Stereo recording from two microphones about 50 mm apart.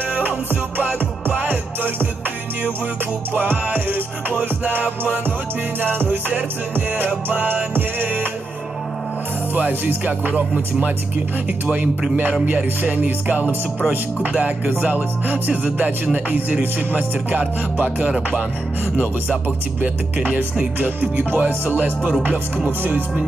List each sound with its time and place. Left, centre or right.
0.7 s music: right
3.3 s music: right
9.6 s speech: right
12.9 s speech: right
14.2 s music: right
14.7 s speech: right
16.9 s speech: right
20.8 s speech: right